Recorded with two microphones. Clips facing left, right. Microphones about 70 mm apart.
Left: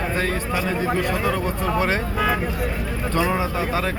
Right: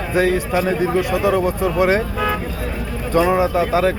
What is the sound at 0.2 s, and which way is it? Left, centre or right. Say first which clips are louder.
A man's voice: right 11 dB; centre.